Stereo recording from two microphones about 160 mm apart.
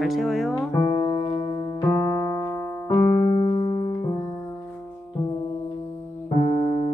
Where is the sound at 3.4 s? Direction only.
35° left (ahead or behind).